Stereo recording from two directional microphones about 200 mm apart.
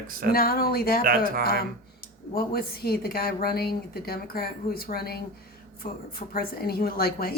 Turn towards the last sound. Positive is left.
turn(degrees=50)  # may be behind; listen again after turning